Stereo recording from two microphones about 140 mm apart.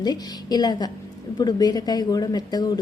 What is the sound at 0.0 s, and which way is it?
A woman's voice, 30° left (ahead or behind).